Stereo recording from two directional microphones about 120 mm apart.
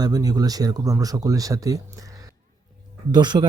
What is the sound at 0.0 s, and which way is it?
Speech, 30° right (ahead or behind).